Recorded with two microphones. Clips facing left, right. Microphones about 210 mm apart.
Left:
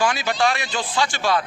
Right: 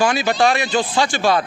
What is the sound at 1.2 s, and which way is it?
Speech, 45° right (ahead or behind).